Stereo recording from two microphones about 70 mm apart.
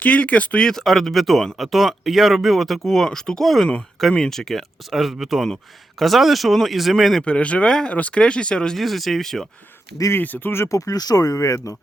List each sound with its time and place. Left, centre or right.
0.0 s speech: left; by 7.3 s centre
7.3 s speech: centre
10.1 s speech: left
10.7 s speech: left